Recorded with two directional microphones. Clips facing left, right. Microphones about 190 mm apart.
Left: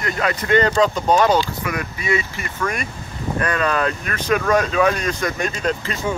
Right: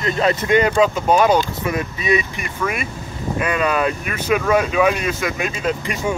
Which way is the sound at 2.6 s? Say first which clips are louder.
Right 1 dB; 5° right (ahead or behind).